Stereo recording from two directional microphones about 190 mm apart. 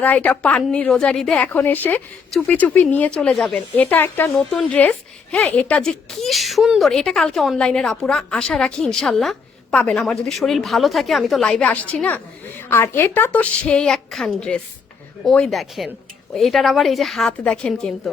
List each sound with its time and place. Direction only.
0.0 s a woman's voice: 10° left (ahead or behind)